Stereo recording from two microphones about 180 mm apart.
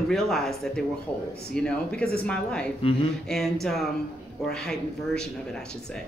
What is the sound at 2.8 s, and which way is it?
Speech, 30° left (ahead or behind).